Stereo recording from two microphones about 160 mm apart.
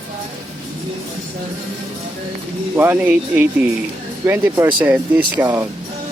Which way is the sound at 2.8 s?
10° right (ahead or behind).